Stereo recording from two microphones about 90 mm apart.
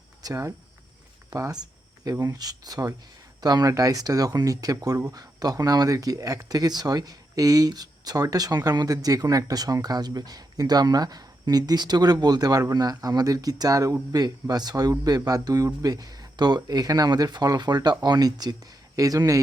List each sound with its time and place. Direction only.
0.2 s speech: 40° right (ahead or behind)